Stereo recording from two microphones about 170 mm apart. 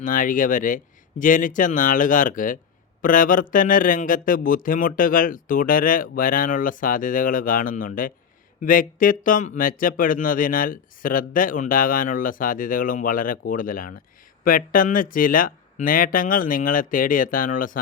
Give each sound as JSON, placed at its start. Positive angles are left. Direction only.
{"t": 0.0, "sound": "speech", "side_deg": 50}